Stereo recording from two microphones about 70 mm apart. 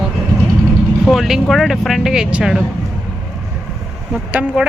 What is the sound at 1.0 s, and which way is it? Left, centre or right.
Speech, centre.